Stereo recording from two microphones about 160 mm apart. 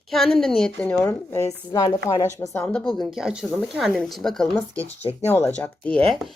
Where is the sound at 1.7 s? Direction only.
25° left (ahead or behind).